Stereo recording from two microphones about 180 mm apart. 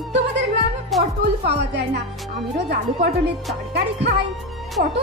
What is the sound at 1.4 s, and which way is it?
A woman's voice, 70° right (ahead or behind).